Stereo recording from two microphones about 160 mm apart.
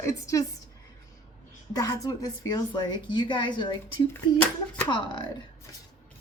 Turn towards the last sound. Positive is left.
turn(degrees=30)  # may be behind; listen again after turning